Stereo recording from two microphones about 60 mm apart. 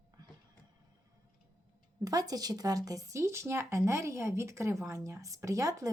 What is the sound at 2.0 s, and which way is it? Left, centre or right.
Speech, right.